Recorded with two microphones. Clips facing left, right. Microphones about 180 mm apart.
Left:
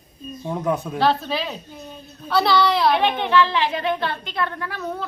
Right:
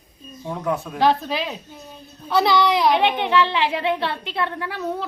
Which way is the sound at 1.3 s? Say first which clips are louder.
Even; 15° right (ahead or behind).